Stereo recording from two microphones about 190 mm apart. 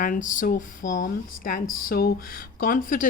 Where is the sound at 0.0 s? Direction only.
45° left (ahead or behind).